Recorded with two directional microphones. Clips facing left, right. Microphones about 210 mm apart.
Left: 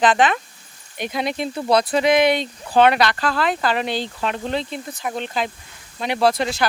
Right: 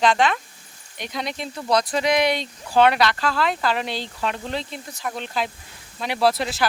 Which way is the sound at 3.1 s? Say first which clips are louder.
Left 2 dB; 50° left (ahead or behind).